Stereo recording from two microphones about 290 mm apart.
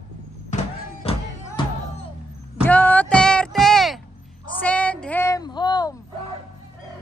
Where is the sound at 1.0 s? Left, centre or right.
Centre.